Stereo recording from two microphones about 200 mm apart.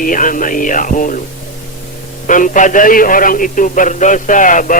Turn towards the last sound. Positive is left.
turn(degrees=40)  # may be behind; listen again after turning